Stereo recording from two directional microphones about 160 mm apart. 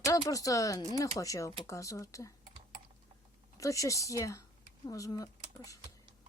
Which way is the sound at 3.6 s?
20° left (ahead or behind).